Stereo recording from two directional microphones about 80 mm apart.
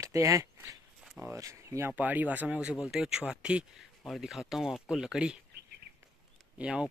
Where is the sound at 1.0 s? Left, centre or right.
Centre.